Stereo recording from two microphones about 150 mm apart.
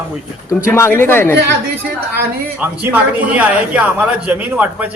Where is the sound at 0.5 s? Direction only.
15° left (ahead or behind).